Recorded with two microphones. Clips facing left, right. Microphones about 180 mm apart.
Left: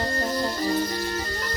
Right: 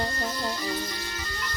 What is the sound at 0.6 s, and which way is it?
Music, 45° left (ahead or behind).